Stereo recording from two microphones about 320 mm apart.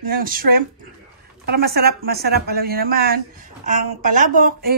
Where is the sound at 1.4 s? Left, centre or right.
Right.